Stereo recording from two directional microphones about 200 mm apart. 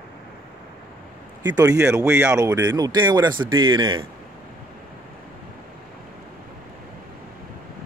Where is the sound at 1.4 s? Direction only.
20° right (ahead or behind).